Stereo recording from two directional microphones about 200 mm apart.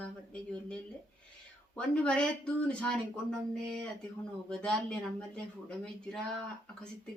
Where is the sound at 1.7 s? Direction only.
5° left (ahead or behind).